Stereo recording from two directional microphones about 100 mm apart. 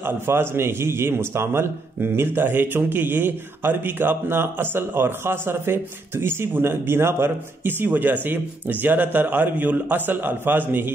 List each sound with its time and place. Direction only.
0.0 s a man's voice: 25° right (ahead or behind)